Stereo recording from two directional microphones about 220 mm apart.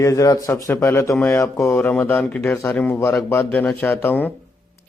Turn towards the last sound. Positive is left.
turn(degrees=10)  # may be behind; listen again after turning